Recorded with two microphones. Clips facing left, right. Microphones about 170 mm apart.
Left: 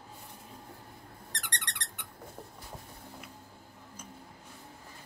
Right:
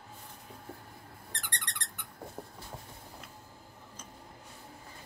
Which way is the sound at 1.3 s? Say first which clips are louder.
Left 1 dB; 70° left (ahead or behind).